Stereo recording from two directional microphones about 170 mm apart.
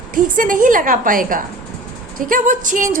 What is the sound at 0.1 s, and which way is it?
A woman's voice, 50° right (ahead or behind).